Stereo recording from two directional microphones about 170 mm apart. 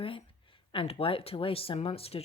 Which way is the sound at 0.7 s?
35° left (ahead or behind).